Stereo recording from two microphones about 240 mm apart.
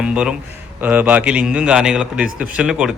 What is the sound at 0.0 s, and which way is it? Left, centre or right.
A man's voice, centre.